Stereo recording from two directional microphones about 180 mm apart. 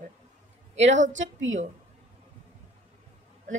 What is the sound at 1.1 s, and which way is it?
Speech, 90° right.